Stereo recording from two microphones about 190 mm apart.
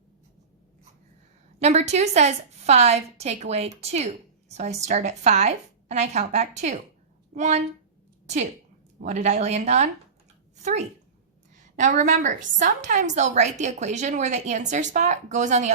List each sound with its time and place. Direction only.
1.5 s a woman's voice: 35° right (ahead or behind)
9.0 s a woman's voice: 40° right (ahead or behind)